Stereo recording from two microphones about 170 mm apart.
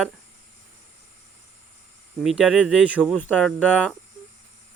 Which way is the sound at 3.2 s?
5° left (ahead or behind).